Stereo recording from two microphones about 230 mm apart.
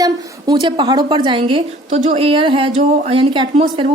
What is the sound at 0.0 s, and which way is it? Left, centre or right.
A woman's voice, centre.